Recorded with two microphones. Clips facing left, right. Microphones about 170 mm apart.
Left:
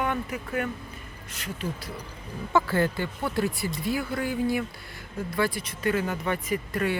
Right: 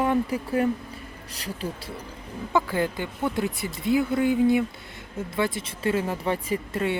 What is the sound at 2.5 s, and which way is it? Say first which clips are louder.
Speech: left 1 dB; 15° right (ahead or behind).